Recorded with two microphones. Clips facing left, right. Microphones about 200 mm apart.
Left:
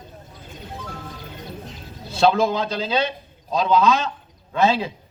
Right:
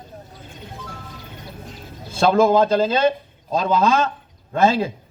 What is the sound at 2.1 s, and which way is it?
A man's voice, 50° right (ahead or behind).